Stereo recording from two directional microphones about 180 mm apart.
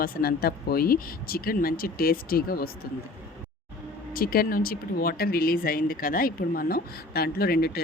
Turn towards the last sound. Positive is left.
turn(degrees=60)  # may be behind; listen again after turning